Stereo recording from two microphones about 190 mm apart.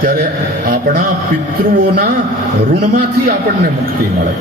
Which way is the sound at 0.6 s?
55° right (ahead or behind).